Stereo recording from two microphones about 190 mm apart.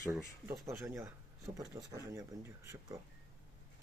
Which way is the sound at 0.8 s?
15° right (ahead or behind).